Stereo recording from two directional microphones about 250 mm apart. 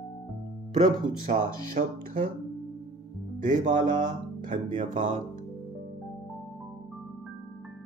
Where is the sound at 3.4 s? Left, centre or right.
Right.